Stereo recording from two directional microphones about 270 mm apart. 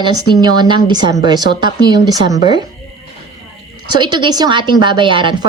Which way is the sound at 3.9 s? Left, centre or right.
Centre.